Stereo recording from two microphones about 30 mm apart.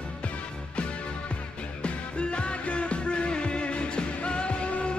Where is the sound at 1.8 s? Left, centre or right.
Left.